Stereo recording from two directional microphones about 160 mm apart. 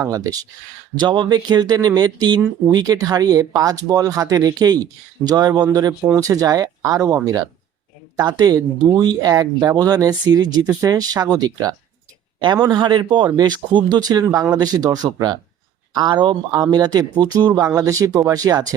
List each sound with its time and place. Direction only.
0.0 s speech: 20° right (ahead or behind)
12.7 s speech: 30° right (ahead or behind)